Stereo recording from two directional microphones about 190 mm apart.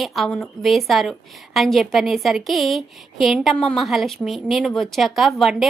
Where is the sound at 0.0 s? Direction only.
Centre (ahead or behind).